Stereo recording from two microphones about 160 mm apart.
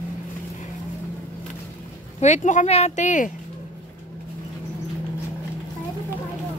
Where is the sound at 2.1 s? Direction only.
45° left (ahead or behind).